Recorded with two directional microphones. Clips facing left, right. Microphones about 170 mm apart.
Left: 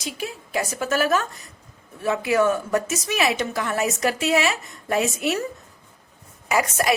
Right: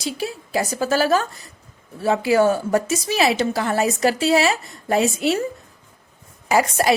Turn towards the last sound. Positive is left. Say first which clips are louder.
# right 4 dB
turn(degrees=-30)  # may be behind; listen again after turning